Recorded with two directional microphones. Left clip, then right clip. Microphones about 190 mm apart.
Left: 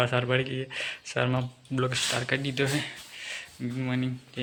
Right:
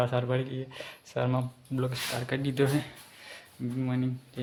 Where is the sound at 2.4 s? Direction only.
20° right (ahead or behind).